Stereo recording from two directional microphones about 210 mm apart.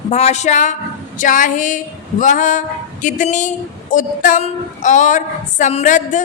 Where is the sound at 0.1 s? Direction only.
30° left (ahead or behind).